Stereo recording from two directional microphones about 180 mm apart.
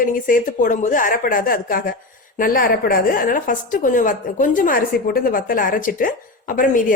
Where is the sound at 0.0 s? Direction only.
50° left (ahead or behind).